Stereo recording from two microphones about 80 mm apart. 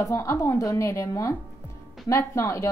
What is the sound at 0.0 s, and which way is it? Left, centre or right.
A woman's voice, left.